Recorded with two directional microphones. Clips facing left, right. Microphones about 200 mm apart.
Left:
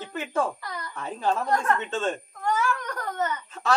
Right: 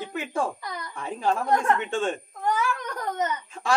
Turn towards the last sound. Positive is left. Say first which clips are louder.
# even
turn(degrees=-10)  # may be behind; listen again after turning